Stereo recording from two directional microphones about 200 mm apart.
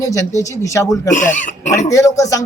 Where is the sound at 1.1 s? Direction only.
40° left (ahead or behind).